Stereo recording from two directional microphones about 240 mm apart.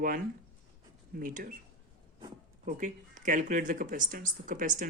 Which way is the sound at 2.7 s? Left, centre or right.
Right.